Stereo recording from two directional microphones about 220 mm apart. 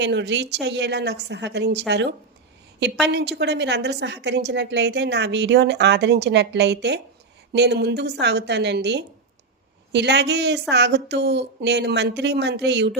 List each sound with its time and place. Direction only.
0.0 s a woman's voice: 50° right (ahead or behind)
3.1 s a woman's voice: 50° right (ahead or behind)